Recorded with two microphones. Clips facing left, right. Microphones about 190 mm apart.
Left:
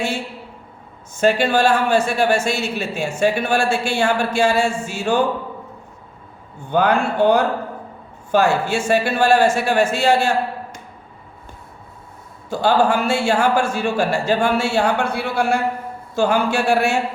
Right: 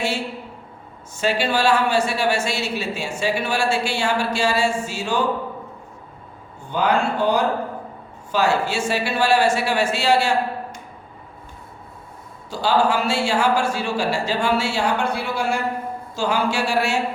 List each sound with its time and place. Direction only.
1.1 s speech: 50° left (ahead or behind)
6.7 s speech: 55° left (ahead or behind)
12.5 s speech: 50° left (ahead or behind)